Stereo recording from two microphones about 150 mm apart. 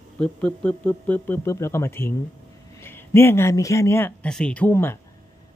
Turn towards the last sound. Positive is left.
turn(degrees=15)  # may be behind; listen again after turning